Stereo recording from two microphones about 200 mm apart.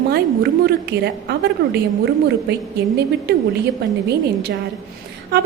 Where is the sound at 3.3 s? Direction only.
50° right (ahead or behind).